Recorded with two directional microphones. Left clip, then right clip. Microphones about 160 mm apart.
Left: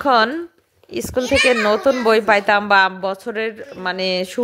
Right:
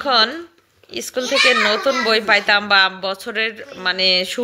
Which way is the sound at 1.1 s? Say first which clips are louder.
Even; 35° left (ahead or behind).